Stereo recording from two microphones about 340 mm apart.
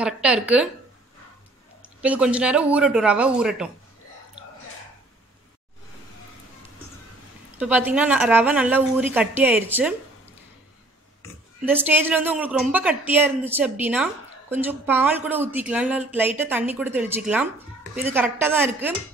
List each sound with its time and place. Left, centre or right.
0.0 s a woman's voice: centre
1.8 s a woman's voice: centre
7.5 s a woman's voice: centre
11.6 s a woman's voice: centre